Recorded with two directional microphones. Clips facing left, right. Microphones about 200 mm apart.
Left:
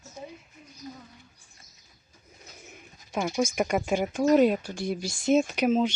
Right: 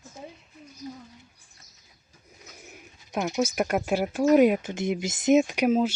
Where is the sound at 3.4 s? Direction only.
5° right (ahead or behind).